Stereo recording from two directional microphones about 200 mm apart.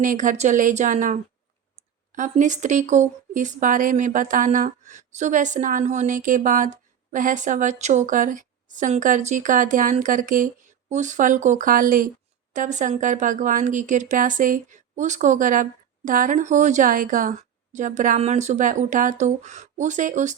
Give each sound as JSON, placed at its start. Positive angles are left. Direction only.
{"t": 0.0, "sound": "a woman's voice", "side_deg": -40}